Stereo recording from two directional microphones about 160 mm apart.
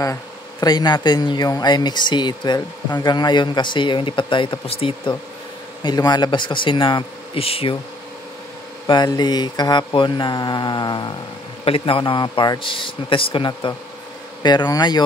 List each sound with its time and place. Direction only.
0.0 s speech: 25° left (ahead or behind)
8.8 s speech: 25° left (ahead or behind)